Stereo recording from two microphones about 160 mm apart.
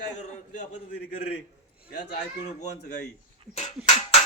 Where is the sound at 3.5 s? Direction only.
45° left (ahead or behind).